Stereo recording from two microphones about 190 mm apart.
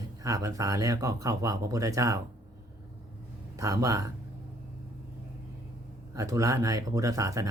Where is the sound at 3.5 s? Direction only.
15° right (ahead or behind).